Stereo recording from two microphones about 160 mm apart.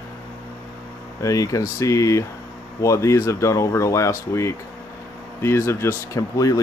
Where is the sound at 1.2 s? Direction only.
20° left (ahead or behind).